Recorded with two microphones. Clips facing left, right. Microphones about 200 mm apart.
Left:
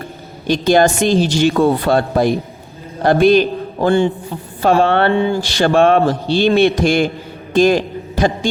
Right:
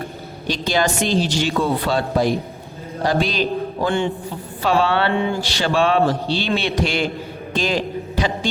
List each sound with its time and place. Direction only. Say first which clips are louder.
0.4 s a woman's voice: left 8 dB; 50° left (ahead or behind)
3.8 s a man's voice: left 8 dB; 40° left (ahead or behind)
4.6 s a woman's voice: left 5 dB; 50° left (ahead or behind)
7.5 s a sound: left 9 dB; 50° left (ahead or behind)